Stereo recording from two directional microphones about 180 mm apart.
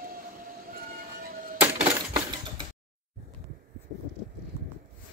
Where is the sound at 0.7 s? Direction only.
50° right (ahead or behind).